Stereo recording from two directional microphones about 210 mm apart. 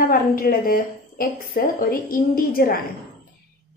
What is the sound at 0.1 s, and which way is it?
A woman's voice, 45° left (ahead or behind).